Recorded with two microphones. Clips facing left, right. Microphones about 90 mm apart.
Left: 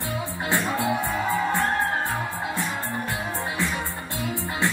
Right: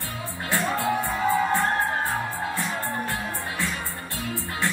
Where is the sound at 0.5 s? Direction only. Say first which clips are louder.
Even; 20° left (ahead or behind).